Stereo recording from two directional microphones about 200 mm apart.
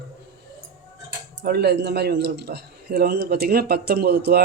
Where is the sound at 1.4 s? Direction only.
55° right (ahead or behind).